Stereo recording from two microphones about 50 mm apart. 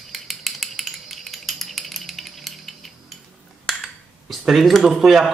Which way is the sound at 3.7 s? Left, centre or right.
Centre.